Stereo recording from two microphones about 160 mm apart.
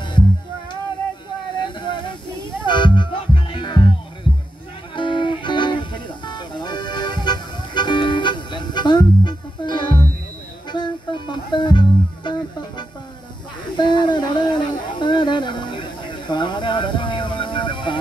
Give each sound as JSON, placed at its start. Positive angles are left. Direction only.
{"t": 1.6, "sound": "music", "side_deg": 30}
{"t": 4.9, "sound": "music", "side_deg": 30}
{"t": 13.7, "sound": "a sound", "side_deg": 30}